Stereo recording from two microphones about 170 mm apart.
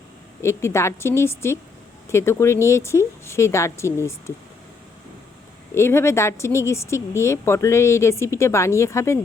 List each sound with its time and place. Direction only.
0.4 s speech: 15° left (ahead or behind)
5.7 s speech: 15° left (ahead or behind)